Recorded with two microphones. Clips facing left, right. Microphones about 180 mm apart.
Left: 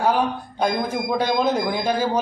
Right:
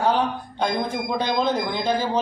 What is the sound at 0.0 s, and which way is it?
Speech, 10° left (ahead or behind).